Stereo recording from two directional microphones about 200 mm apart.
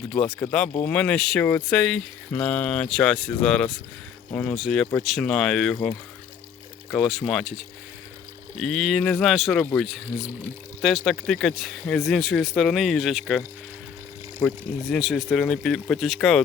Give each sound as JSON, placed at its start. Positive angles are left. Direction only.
{"t": 0.1, "sound": "speech", "side_deg": 5}
{"t": 8.5, "sound": "speech", "side_deg": 0}
{"t": 14.4, "sound": "speech", "side_deg": 0}